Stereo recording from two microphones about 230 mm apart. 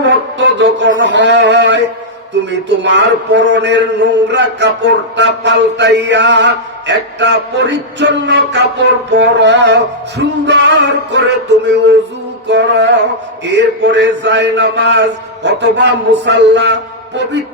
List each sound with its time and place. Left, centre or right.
0.0 s music: right